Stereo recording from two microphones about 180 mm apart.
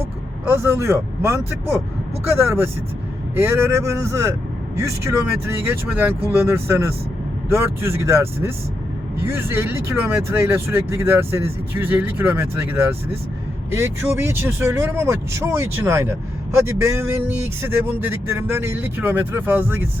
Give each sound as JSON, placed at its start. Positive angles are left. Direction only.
{"t": 0.4, "sound": "speech", "side_deg": -10}
{"t": 3.3, "sound": "speech", "side_deg": -15}